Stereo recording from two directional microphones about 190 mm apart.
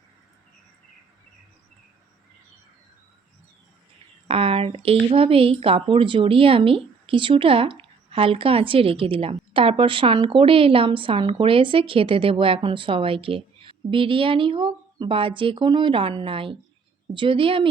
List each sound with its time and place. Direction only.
4.3 s speech: 30° right (ahead or behind)